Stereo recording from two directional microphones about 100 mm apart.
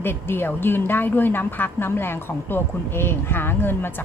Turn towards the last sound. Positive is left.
turn(degrees=20)  # may be behind; listen again after turning